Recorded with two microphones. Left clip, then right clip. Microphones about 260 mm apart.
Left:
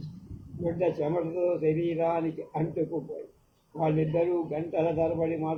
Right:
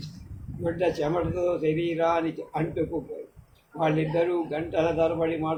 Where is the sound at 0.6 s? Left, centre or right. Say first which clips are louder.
Right 2 dB; right.